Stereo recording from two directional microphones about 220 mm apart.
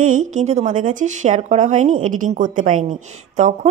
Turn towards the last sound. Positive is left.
turn(degrees=-35)  # may be behind; listen again after turning